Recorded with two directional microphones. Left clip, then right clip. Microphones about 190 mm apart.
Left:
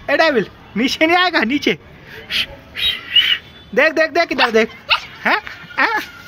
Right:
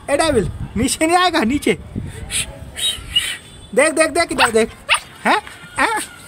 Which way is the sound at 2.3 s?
5° right (ahead or behind).